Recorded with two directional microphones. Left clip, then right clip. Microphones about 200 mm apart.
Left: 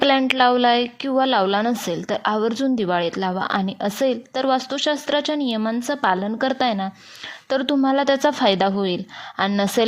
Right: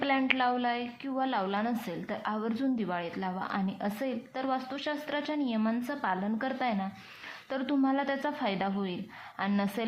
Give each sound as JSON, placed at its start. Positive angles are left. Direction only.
{"t": 0.0, "sound": "a woman's voice", "side_deg": 55}